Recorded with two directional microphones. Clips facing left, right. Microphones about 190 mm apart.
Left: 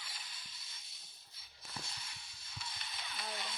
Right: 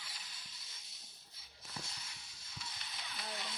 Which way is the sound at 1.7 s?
60° left (ahead or behind).